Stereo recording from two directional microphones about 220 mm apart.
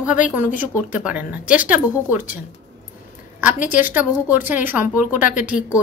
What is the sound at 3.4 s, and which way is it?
A woman's voice, 10° right (ahead or behind).